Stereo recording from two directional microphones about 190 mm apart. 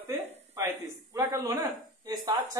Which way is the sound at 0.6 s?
15° right (ahead or behind).